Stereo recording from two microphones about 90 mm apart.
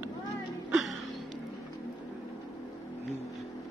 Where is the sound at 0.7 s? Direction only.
Centre (ahead or behind).